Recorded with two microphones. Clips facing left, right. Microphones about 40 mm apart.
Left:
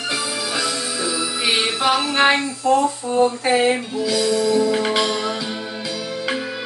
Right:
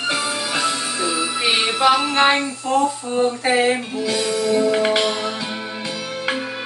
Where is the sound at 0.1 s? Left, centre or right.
Right.